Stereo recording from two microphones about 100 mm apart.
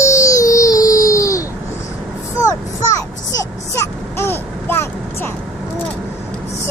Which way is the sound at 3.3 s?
25° left (ahead or behind).